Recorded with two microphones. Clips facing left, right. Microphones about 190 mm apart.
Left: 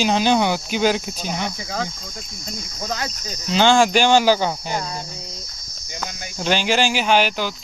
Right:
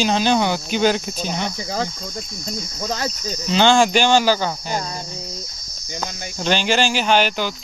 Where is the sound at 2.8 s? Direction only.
30° right (ahead or behind).